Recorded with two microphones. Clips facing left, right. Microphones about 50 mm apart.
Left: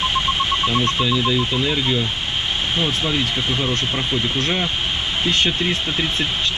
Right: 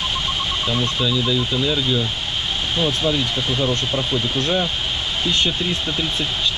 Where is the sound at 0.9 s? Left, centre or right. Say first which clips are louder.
Left 1 dB; left.